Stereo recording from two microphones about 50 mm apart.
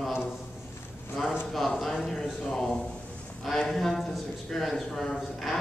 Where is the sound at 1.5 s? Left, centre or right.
Centre.